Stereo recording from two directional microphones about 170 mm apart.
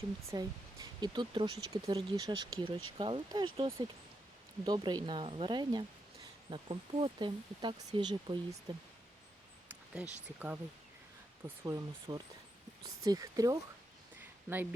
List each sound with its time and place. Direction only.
0.3 s speech: 20° right (ahead or behind)
9.6 s a sound: 5° right (ahead or behind)
10.2 s speech: 10° right (ahead or behind)